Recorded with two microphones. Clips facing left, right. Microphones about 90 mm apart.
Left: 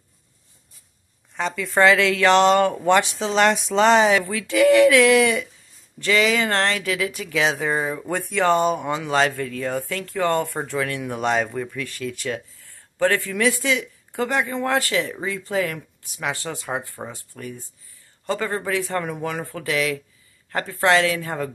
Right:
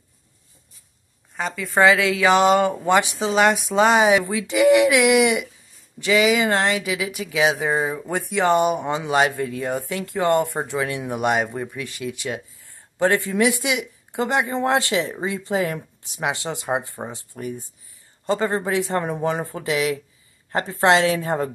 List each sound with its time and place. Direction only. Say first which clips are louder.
1.3 s speech: even; centre (ahead or behind); by 21.5 s 25° right (ahead or behind)